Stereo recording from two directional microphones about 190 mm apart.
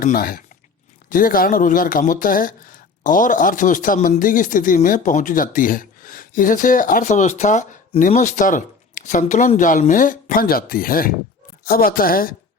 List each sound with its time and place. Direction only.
0.0 s speech: 50° left (ahead or behind)